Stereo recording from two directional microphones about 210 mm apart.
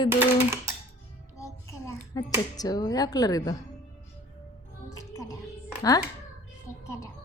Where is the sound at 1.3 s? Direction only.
15° left (ahead or behind).